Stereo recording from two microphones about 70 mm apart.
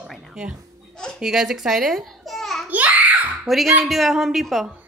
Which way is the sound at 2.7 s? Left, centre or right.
Right.